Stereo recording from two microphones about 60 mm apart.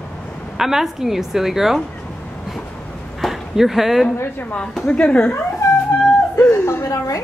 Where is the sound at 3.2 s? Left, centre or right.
Centre.